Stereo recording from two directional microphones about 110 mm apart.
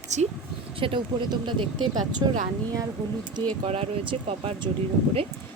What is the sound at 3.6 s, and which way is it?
Speech, 60° right (ahead or behind).